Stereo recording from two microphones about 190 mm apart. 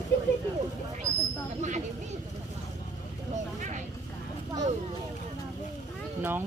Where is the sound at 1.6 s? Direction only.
40° right (ahead or behind).